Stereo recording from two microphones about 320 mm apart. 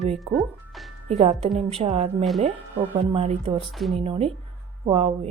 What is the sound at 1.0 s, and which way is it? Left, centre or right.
Speech, centre.